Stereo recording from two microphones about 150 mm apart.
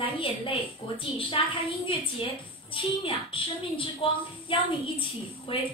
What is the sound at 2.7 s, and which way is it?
A woman's voice, 35° left (ahead or behind).